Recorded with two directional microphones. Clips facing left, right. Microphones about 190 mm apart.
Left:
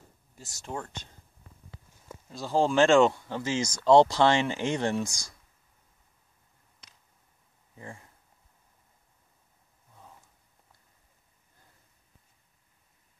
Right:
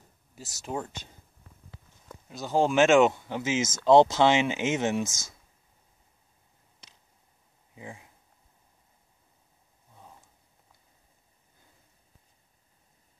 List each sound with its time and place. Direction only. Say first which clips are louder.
0.4 s speech: right 3 dB; 15° right (ahead or behind)
2.3 s speech: right 1 dB; 20° right (ahead or behind)
4.6 s speech: right 1 dB; 5° right (ahead or behind)
7.7 s speech: right 1 dB; 5° right (ahead or behind)